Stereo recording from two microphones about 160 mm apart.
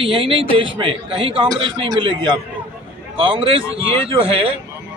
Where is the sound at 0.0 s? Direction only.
35° right (ahead or behind).